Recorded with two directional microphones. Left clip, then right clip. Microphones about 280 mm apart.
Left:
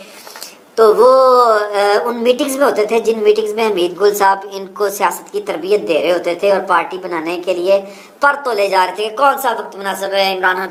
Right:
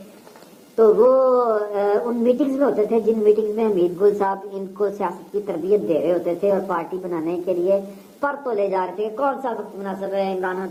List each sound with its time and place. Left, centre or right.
0.8 s a woman's voice: centre
8.5 s a woman's voice: centre